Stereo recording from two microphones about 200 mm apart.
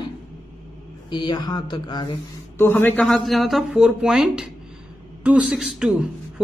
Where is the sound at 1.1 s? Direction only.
25° left (ahead or behind).